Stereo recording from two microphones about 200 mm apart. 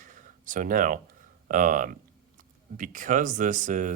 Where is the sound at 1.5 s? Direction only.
40° right (ahead or behind).